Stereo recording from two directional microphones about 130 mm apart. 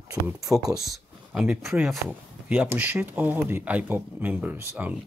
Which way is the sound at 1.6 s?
Centre (ahead or behind).